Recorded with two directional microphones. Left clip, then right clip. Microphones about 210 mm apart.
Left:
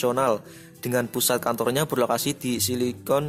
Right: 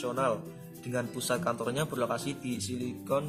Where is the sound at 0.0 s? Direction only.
50° left (ahead or behind).